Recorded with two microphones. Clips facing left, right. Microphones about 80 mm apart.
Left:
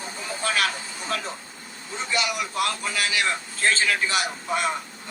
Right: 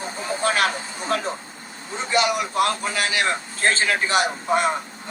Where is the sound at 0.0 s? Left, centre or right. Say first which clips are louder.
Right 6 dB; right.